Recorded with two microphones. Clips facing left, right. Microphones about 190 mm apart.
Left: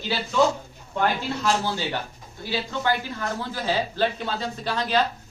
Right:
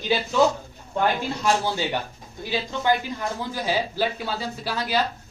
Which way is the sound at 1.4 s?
15° right (ahead or behind).